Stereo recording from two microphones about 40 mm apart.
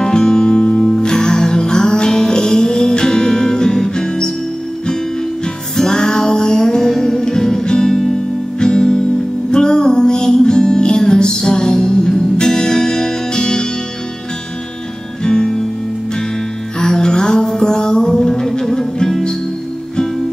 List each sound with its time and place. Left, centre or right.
0.0 s music: centre
0.8 s music: centre
5.8 s music: centre
15.2 s music: centre
16.8 s music: centre